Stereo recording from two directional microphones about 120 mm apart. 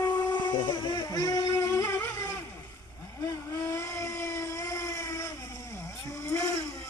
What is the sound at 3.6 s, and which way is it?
Vehicle, 25° left (ahead or behind).